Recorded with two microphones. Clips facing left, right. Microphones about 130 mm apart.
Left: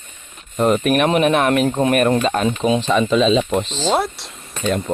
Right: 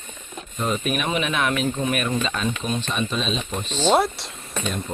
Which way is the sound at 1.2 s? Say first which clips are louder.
Left 8 dB; 50° left (ahead or behind).